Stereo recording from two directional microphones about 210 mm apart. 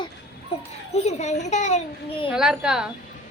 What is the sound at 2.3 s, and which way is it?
Speech, 5° right (ahead or behind).